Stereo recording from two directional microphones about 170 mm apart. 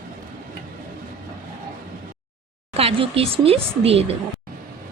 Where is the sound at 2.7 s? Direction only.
35° right (ahead or behind).